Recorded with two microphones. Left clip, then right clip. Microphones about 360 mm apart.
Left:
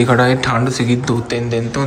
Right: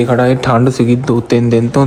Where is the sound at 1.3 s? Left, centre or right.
Centre.